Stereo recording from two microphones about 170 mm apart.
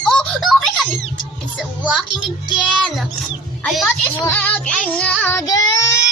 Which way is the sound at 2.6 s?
Centre (ahead or behind).